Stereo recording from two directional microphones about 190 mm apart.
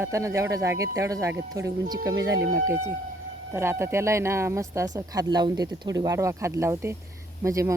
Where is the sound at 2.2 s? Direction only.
70° right (ahead or behind).